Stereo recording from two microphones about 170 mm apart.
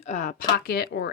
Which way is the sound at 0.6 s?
70° left (ahead or behind).